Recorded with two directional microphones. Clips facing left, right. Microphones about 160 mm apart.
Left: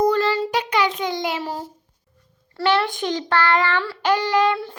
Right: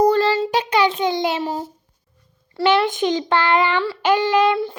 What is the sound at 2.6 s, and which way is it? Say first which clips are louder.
A child's voice: right 3 dB; 20° right (ahead or behind).